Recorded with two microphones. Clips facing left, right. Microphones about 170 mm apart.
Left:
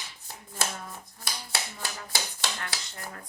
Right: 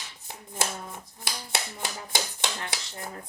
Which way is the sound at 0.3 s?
20° right (ahead or behind).